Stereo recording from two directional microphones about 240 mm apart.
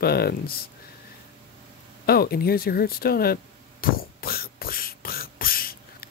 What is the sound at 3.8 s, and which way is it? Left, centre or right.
Beatboxing, left.